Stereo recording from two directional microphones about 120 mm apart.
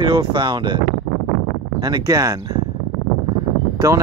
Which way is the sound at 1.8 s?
30° right (ahead or behind).